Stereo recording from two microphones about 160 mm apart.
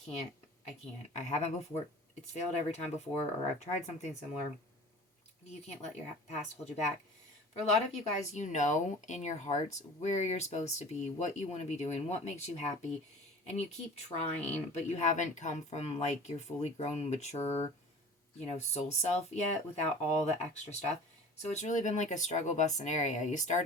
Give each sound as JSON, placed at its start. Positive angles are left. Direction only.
{"t": 1.1, "sound": "speech", "side_deg": 45}
{"t": 5.8, "sound": "speech", "side_deg": 45}